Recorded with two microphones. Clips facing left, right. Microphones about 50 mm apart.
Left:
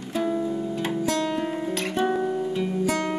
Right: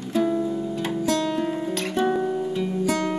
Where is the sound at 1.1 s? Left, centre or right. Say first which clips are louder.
Right 4 dB; left.